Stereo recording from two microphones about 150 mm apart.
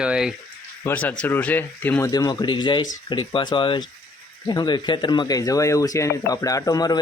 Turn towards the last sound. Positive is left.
turn(degrees=25)  # may be behind; listen again after turning